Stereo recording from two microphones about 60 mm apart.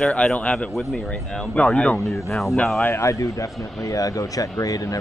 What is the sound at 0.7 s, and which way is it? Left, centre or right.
Speech, centre.